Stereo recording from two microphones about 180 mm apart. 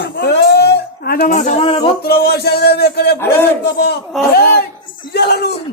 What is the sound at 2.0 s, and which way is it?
A man's voice, 60° left (ahead or behind).